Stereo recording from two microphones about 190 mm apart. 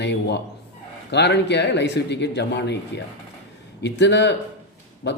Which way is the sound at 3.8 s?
65° left (ahead or behind).